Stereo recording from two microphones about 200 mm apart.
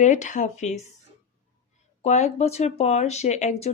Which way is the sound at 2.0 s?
35° left (ahead or behind).